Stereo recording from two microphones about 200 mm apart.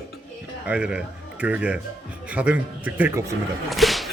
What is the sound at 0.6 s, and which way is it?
Speech, 5° right (ahead or behind).